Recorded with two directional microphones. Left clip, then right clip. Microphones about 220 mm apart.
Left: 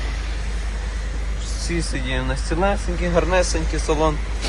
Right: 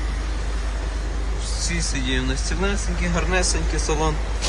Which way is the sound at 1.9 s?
20° left (ahead or behind).